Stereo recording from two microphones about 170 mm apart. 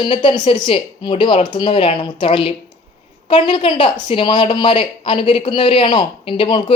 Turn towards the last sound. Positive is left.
turn(degrees=30)  # may be behind; listen again after turning